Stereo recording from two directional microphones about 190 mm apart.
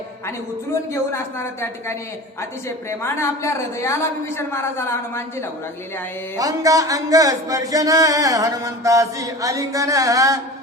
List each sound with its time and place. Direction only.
1.1 s a woman's voice: 15° left (ahead or behind)
3.0 s a woman's voice: 15° left (ahead or behind)
6.3 s speech: 20° right (ahead or behind)